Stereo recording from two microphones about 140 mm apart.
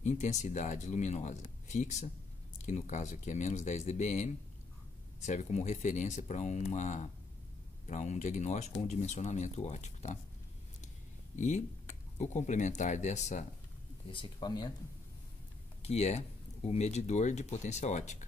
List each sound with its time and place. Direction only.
0.0 s speech: 55° left (ahead or behind)
11.3 s speech: 60° left (ahead or behind)
14.1 s speech: 30° left (ahead or behind)
15.8 s speech: 50° left (ahead or behind)